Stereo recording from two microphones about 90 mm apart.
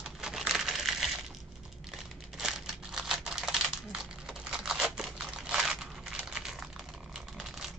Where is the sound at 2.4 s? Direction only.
5° right (ahead or behind).